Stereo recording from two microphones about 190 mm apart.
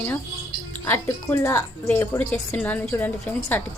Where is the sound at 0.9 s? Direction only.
15° left (ahead or behind).